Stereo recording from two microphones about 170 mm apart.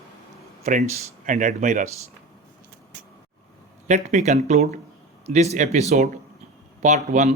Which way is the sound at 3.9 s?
45° right (ahead or behind).